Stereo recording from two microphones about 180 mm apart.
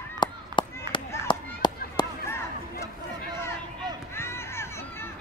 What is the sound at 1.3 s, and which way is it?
Chop, 25° left (ahead or behind).